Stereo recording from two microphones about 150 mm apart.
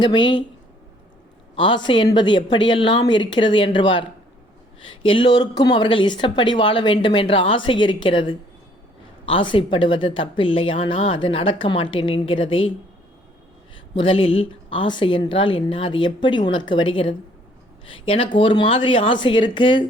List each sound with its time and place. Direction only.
0.0 s speech: 30° left (ahead or behind)
1.5 s speech: 30° left (ahead or behind)
13.9 s speech: 35° left (ahead or behind)